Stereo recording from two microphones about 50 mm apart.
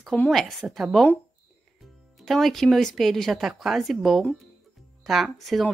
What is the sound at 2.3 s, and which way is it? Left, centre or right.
Speech, centre.